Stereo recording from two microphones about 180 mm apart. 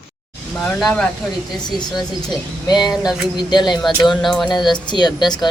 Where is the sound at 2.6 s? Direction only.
20° left (ahead or behind).